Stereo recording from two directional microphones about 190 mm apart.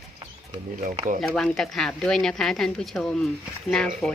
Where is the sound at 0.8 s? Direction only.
40° right (ahead or behind).